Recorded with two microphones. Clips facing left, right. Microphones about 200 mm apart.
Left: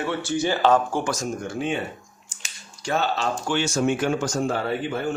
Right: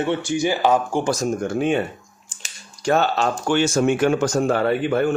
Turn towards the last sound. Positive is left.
turn(degrees=-60)  # may be behind; listen again after turning